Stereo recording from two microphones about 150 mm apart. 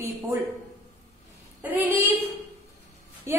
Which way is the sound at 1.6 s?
15° right (ahead or behind).